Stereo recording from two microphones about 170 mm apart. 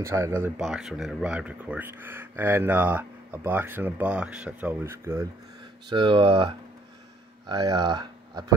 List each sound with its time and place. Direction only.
0.0 s speech: 15° right (ahead or behind)
0.6 s speech: centre (ahead or behind)
5.9 s speech: 30° right (ahead or behind)